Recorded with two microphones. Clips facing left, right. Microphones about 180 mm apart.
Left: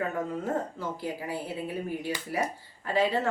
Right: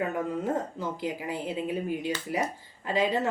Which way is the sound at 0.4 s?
20° right (ahead or behind).